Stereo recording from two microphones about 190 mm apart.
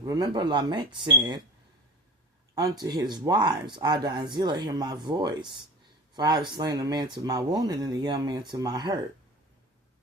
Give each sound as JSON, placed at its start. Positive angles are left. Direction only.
{"t": 0.0, "sound": "speech", "side_deg": -20}
{"t": 2.6, "sound": "speech", "side_deg": -20}